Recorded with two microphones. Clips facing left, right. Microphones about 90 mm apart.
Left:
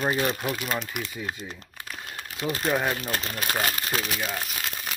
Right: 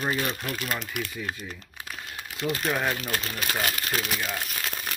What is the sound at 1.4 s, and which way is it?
Speech, 25° left (ahead or behind).